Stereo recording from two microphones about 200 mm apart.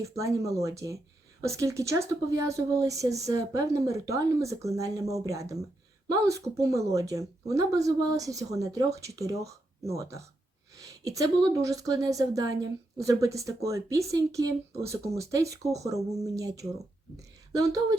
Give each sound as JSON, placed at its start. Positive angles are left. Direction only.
{"t": 0.0, "sound": "speech", "side_deg": -15}